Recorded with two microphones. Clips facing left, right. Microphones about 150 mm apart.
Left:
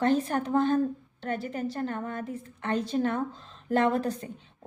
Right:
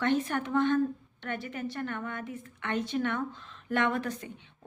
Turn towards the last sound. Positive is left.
turn(degrees=35)  # may be behind; listen again after turning